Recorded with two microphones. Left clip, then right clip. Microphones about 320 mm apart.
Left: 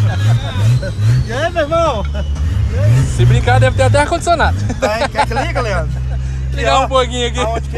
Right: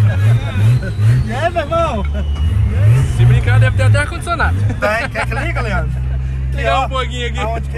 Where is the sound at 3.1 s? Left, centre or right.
Centre.